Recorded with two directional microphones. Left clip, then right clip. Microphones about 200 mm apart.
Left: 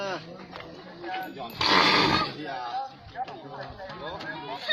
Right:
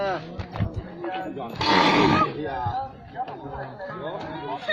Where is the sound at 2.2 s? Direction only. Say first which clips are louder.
Right 6 dB; 40° left (ahead or behind).